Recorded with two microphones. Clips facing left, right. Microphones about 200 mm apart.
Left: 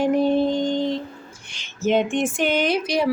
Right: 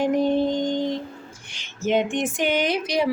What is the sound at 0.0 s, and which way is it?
Music, 15° right (ahead or behind).